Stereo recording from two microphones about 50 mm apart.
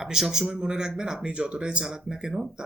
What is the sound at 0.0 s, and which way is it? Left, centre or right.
Speech, centre.